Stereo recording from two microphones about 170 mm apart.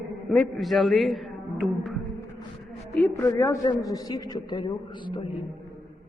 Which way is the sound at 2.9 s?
10° left (ahead or behind).